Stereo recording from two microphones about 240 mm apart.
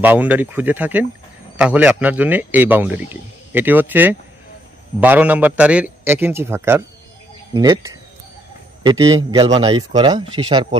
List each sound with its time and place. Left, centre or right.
0.0 s speech: centre